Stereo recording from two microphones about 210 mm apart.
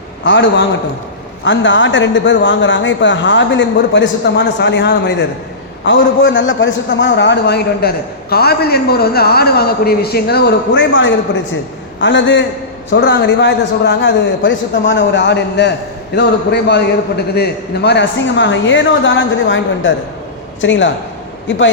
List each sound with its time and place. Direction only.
0.3 s a man's voice: 55° left (ahead or behind)